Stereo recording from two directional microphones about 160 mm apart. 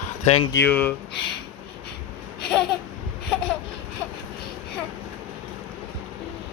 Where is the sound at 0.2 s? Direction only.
40° left (ahead or behind).